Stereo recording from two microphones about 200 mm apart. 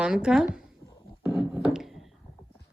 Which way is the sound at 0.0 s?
5° right (ahead or behind).